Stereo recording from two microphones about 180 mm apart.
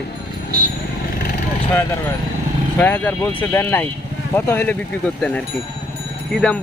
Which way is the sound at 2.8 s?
10° left (ahead or behind).